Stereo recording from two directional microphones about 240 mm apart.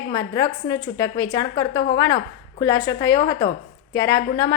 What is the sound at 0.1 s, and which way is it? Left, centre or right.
A woman's voice, centre.